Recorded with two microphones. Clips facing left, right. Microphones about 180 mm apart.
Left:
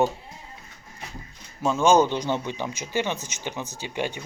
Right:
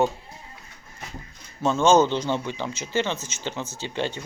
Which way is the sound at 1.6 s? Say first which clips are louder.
Right 1 dB; 10° left (ahead or behind).